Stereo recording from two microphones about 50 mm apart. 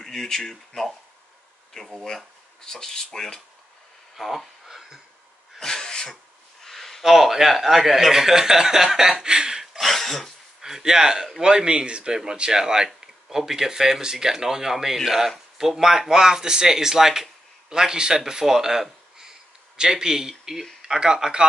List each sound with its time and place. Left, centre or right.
0.0 s speech: centre
4.2 s speech: centre
5.6 s sneeze: centre
6.6 s a sound: centre
7.0 s speech: centre
9.2 s a sound: centre
9.8 s throat clearing: centre
10.6 s speech: centre